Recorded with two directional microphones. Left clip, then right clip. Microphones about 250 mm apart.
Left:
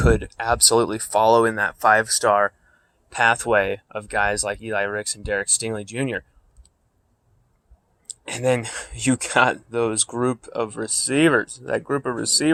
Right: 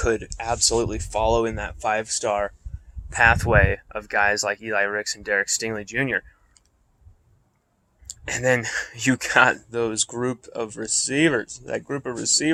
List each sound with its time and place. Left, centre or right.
0.0 s speech: centre
8.0 s speech: centre